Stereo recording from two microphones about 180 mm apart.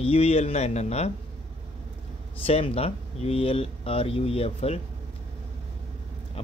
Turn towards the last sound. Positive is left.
turn(degrees=35)  # may be behind; listen again after turning